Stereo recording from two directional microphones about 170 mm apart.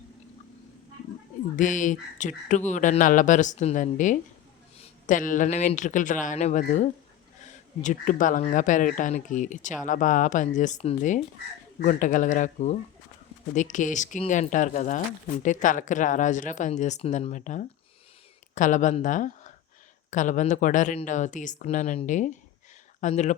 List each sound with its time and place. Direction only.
1.5 s speech: 50° left (ahead or behind)